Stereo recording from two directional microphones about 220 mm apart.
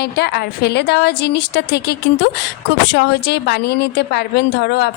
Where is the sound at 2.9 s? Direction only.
50° left (ahead or behind).